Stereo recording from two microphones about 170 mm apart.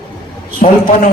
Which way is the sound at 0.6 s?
50° left (ahead or behind).